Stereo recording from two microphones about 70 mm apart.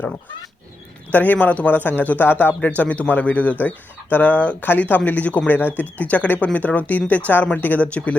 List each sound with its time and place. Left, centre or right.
1.1 s a man's voice: left